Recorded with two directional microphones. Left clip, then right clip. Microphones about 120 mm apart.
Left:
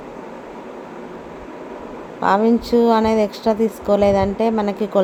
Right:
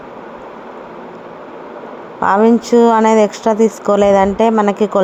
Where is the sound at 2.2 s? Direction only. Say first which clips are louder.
Right 5 dB; 35° right (ahead or behind).